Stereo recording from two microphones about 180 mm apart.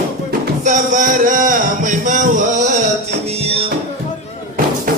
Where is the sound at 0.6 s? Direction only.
45° right (ahead or behind).